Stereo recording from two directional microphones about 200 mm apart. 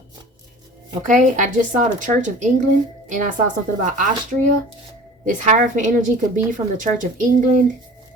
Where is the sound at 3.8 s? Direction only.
40° right (ahead or behind).